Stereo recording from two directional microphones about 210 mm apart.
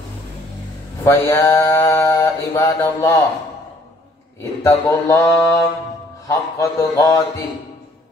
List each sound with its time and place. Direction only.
1.0 s mantra: 10° left (ahead or behind)
4.4 s mantra: 15° left (ahead or behind)